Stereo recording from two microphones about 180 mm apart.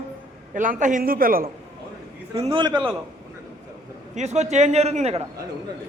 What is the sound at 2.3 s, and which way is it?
Speech, 30° right (ahead or behind).